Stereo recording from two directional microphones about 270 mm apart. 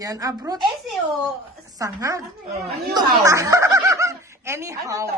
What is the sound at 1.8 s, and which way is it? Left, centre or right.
Speech, centre.